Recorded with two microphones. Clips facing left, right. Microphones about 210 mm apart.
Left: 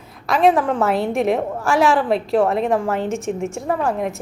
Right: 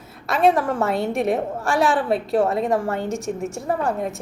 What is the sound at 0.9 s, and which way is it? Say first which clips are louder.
A woman's voice: left 2 dB; centre (ahead or behind).